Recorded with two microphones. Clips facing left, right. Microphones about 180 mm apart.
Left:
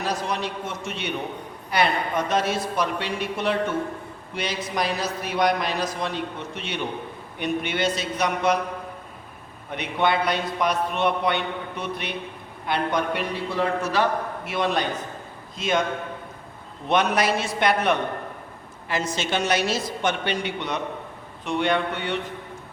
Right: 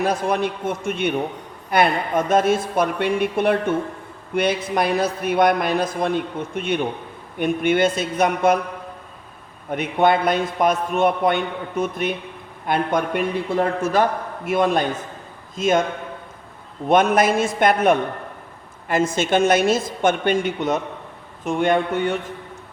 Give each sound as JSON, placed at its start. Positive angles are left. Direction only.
{"t": 0.0, "sound": "a man's voice", "side_deg": -55}
{"t": 9.7, "sound": "a man's voice", "side_deg": -50}
{"t": 16.9, "sound": "a man's voice", "side_deg": -50}